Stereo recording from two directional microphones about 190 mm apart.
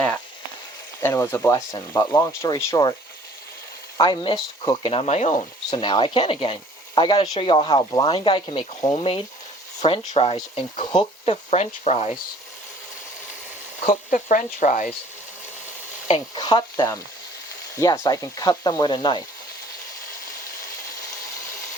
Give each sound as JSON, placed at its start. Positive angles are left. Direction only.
{"t": 1.0, "sound": "speech", "side_deg": 15}
{"t": 3.9, "sound": "speech", "side_deg": 25}
{"t": 5.8, "sound": "speech", "side_deg": 25}
{"t": 13.8, "sound": "speech", "side_deg": 40}
{"t": 16.0, "sound": "stir", "side_deg": 30}
{"t": 17.7, "sound": "speech", "side_deg": 15}